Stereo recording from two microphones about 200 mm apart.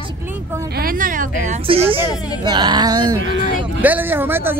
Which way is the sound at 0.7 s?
45° right (ahead or behind).